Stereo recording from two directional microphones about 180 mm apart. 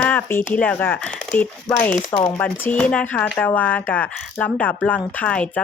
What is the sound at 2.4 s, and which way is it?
Speech, 10° left (ahead or behind).